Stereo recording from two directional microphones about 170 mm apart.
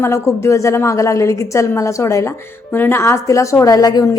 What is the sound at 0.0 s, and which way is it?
A woman's voice, 15° left (ahead or behind).